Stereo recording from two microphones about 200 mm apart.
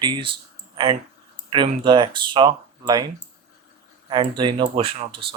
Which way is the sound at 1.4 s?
25° right (ahead or behind).